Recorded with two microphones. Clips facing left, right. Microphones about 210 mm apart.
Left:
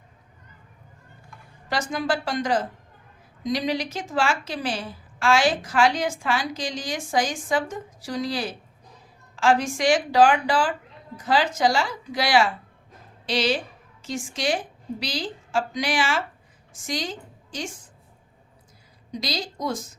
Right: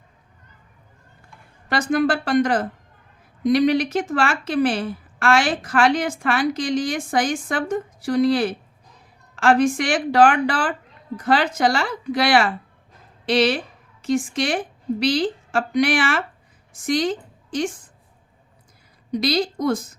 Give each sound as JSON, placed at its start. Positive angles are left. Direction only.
{"t": 1.9, "sound": "a woman's voice", "side_deg": -60}
{"t": 19.1, "sound": "a woman's voice", "side_deg": -60}